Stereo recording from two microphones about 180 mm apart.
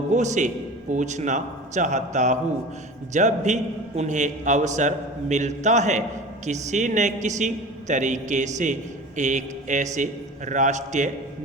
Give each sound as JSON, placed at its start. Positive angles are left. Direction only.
{"t": 0.1, "sound": "a man's voice", "side_deg": -40}